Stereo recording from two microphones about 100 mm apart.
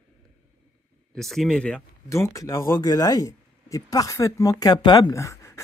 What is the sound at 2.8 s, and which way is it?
Speech, 40° left (ahead or behind).